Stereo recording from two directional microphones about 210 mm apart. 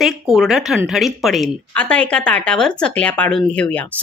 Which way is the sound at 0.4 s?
Centre (ahead or behind).